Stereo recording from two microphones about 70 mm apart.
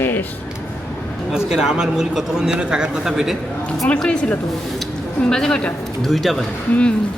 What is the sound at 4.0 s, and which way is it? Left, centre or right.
Speech, centre.